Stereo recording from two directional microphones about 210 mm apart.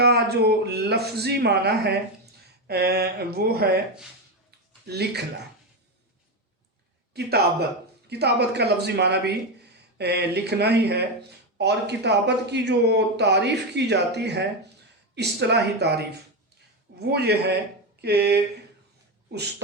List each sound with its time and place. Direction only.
0.0 s speech: 50° right (ahead or behind)
4.9 s speech: 50° right (ahead or behind)
7.1 s a man's voice: 50° right (ahead or behind)
17.1 s speech: 50° right (ahead or behind)